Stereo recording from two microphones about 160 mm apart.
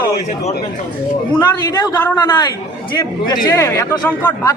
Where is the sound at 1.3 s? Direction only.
25° left (ahead or behind).